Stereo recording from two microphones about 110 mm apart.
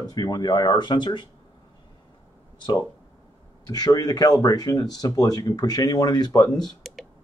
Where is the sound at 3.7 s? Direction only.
35° left (ahead or behind).